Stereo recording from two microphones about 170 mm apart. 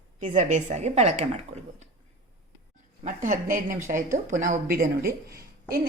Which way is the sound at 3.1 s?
50° right (ahead or behind).